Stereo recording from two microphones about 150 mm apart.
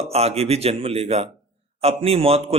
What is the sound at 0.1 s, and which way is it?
A man's voice, 45° right (ahead or behind).